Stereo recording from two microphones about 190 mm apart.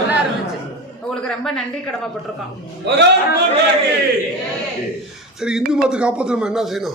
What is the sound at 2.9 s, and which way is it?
Speech, 65° right (ahead or behind).